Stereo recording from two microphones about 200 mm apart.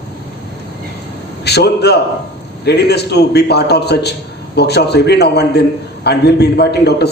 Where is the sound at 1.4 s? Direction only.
55° left (ahead or behind).